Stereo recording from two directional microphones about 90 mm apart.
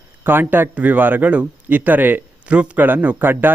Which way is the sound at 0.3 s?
25° right (ahead or behind).